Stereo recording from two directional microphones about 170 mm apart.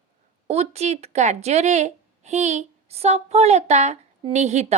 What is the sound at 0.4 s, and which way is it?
Speech, 40° right (ahead or behind).